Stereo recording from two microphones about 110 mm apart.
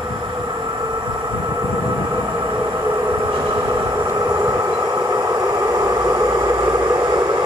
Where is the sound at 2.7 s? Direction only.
30° right (ahead or behind).